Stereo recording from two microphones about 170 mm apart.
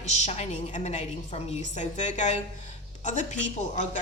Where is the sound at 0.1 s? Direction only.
40° left (ahead or behind).